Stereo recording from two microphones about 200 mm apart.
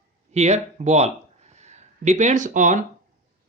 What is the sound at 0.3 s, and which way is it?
Speech, 35° right (ahead or behind).